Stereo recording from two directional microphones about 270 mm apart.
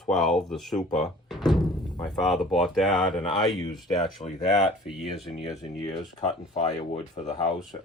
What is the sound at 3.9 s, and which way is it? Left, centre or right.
Speech, centre.